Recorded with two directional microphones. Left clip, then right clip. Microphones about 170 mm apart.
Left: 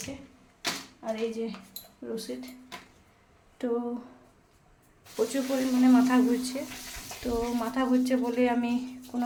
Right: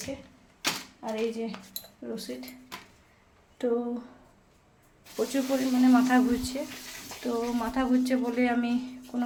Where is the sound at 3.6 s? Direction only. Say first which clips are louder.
Right 3 dB; 5° right (ahead or behind).